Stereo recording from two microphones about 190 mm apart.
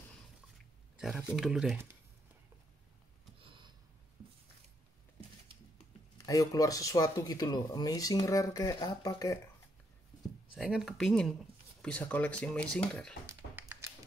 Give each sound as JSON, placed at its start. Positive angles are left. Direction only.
{"t": 0.9, "sound": "a sound", "side_deg": -5}
{"t": 1.3, "sound": "speech", "side_deg": -5}
{"t": 3.3, "sound": "a sound", "side_deg": -25}
{"t": 6.2, "sound": "speech", "side_deg": 20}
{"t": 10.5, "sound": "speech", "side_deg": -5}
{"t": 13.3, "sound": "tap", "side_deg": -10}